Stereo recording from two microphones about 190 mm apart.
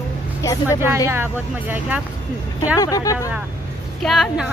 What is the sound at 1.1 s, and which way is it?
Speech, 10° right (ahead or behind).